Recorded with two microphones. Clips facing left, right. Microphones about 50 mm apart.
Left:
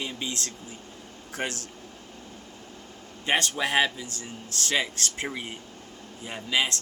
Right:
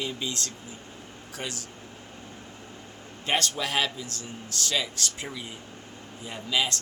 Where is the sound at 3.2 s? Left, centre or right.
Left.